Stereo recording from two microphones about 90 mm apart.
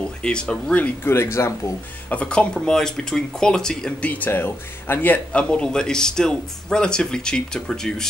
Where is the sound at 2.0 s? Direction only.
15° left (ahead or behind).